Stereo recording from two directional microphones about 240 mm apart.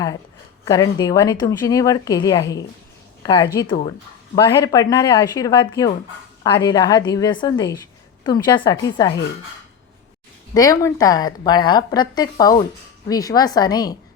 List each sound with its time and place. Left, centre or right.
0.6 s a woman's voice: centre
10.5 s a woman's voice: centre